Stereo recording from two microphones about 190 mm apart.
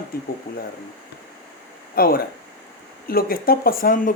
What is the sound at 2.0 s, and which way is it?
Speech, 50° left (ahead or behind).